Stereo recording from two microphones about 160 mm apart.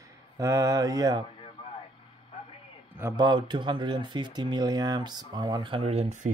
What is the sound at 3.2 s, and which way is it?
Speech, 30° right (ahead or behind).